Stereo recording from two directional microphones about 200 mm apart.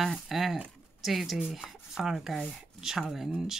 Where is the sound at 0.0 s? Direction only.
Centre (ahead or behind).